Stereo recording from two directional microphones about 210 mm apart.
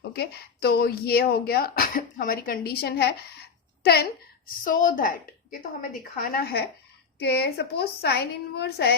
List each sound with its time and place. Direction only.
0.1 s speech: 50° left (ahead or behind)
4.6 s a woman's voice: 40° left (ahead or behind)